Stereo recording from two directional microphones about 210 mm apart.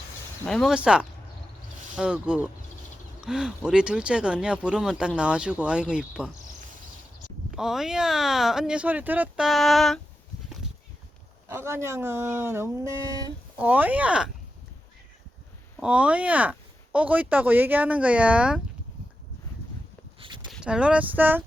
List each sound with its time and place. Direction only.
0.4 s speech: centre (ahead or behind)
7.5 s speech: centre (ahead or behind)
11.4 s speech: 10° right (ahead or behind)
15.8 s speech: 5° right (ahead or behind)
20.1 s a sound: 25° right (ahead or behind)
20.5 s speech: 5° right (ahead or behind)